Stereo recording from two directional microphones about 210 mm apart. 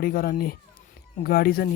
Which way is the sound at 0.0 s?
45° left (ahead or behind).